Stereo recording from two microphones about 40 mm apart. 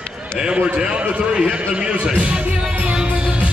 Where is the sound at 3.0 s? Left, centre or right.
Right.